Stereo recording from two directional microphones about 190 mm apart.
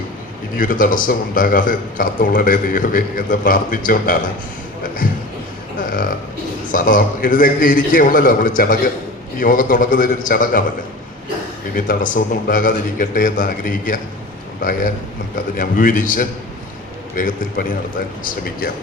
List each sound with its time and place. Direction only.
0.5 s a man's voice: 45° left (ahead or behind)
6.7 s a man's voice: 45° left (ahead or behind)
11.7 s a man's voice: 45° left (ahead or behind)